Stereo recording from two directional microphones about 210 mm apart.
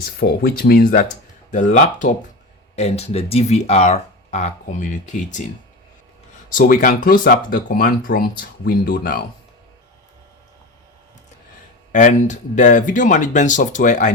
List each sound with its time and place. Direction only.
0.2 s speech: 50° left (ahead or behind)
6.5 s speech: 40° left (ahead or behind)
11.9 s speech: 35° left (ahead or behind)